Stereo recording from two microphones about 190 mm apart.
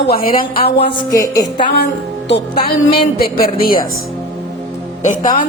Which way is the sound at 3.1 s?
50° left (ahead or behind).